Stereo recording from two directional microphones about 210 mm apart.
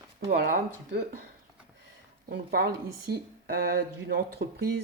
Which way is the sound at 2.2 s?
45° right (ahead or behind).